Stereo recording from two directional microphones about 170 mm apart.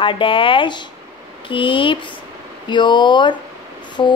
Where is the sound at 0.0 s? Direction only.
30° left (ahead or behind).